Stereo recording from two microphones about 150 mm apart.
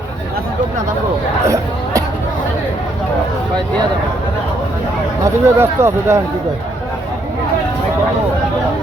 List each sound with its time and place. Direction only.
1.5 s chatter: 20° right (ahead or behind)
5.2 s speech: 15° right (ahead or behind)